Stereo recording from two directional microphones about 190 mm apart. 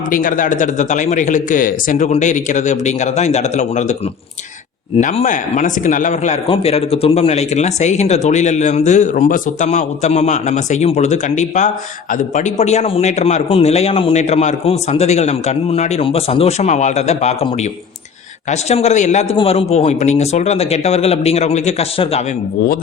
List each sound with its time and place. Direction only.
0.1 s a man's voice: 45° left (ahead or behind)
4.9 s a man's voice: 40° left (ahead or behind)